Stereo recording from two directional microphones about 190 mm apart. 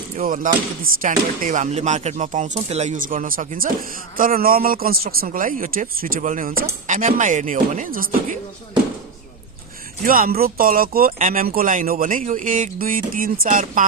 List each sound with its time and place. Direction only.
0.2 s speech: 45° right (ahead or behind)
10.0 s speech: 50° right (ahead or behind)